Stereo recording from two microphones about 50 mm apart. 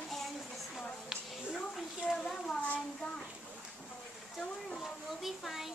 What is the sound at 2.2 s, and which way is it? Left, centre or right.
Speech, centre.